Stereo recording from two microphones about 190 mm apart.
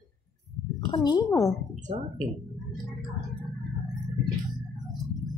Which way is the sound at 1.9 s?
35° right (ahead or behind).